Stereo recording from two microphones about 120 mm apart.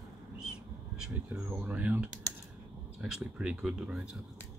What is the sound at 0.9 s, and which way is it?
Speech, 5° right (ahead or behind).